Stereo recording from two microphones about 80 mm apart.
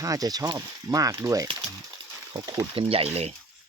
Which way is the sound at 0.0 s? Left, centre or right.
Right.